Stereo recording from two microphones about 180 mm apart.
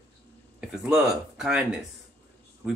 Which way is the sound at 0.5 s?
5° right (ahead or behind).